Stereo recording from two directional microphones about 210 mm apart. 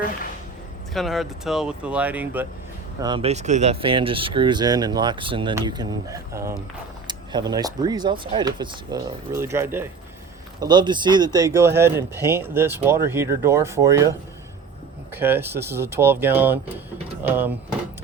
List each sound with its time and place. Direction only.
0.9 s speech: centre (ahead or behind)
3.0 s speech: 25° right (ahead or behind)